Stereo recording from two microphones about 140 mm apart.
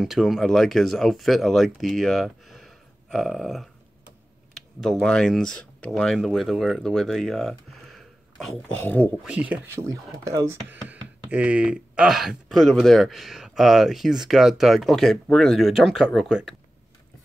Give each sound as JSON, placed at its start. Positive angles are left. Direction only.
{"t": 0.0, "sound": "speech", "side_deg": 0}
{"t": 4.7, "sound": "speech", "side_deg": 5}
{"t": 8.8, "sound": "speech", "side_deg": 10}
{"t": 9.2, "sound": "speech", "side_deg": -10}
{"t": 9.8, "sound": "speech", "side_deg": -25}
{"t": 10.9, "sound": "speech", "side_deg": -10}